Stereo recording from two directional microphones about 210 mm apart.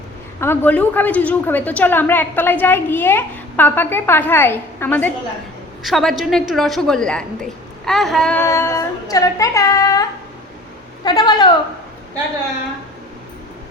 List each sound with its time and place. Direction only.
0.3 s a woman's voice: 10° left (ahead or behind)